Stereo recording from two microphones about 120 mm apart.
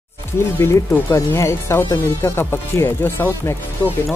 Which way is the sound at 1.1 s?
25° left (ahead or behind).